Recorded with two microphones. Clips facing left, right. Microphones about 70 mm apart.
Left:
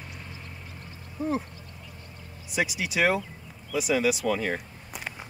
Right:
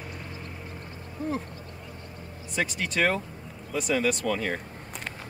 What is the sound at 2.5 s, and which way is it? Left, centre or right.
Speech, centre.